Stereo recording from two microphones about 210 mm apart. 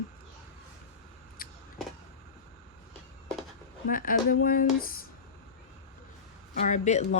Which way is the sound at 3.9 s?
40° left (ahead or behind).